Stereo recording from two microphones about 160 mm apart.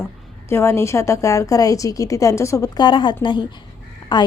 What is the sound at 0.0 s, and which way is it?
A woman's voice, 15° left (ahead or behind).